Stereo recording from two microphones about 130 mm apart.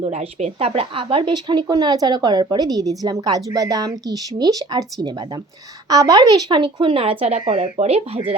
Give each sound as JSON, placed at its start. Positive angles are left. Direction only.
{"t": 0.0, "sound": "a woman's voice", "side_deg": -60}